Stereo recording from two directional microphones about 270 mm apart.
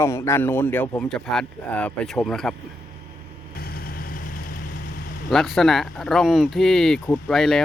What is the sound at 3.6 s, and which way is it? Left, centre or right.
Vehicle, left.